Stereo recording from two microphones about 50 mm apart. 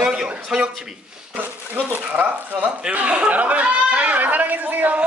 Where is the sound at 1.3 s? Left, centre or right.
Right.